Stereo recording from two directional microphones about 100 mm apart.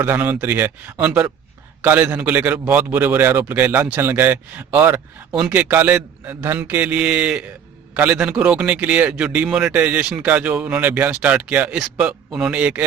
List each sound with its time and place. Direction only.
0.0 s a man's voice: 20° right (ahead or behind)